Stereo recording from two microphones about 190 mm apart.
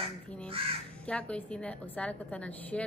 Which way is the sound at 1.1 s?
5° left (ahead or behind).